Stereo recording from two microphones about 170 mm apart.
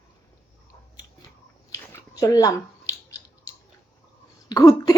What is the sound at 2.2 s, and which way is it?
Speech, 20° left (ahead or behind).